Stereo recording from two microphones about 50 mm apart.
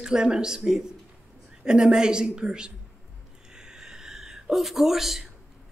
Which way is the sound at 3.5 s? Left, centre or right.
Centre.